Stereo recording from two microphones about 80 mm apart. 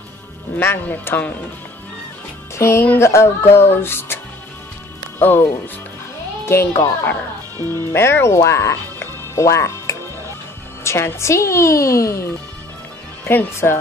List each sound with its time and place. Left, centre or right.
0.6 s speech: left
2.5 s a woman's voice: left
5.2 s a woman's voice: left
13.2 s speech: left